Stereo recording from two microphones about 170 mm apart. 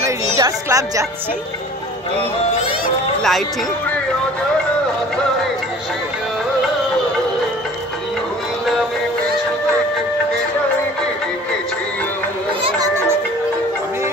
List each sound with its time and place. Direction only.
0.4 s speech: 20° right (ahead or behind)
3.2 s speech: centre (ahead or behind)